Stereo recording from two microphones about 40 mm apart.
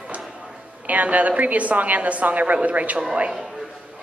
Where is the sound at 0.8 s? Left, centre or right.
Right.